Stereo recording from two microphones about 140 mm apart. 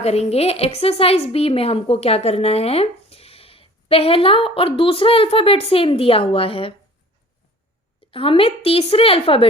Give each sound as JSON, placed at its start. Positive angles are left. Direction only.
{"t": 0.0, "sound": "a woman's voice", "side_deg": 50}
{"t": 8.1, "sound": "a woman's voice", "side_deg": 40}